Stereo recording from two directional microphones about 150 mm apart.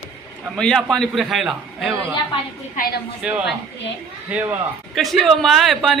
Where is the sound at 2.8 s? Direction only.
65° left (ahead or behind).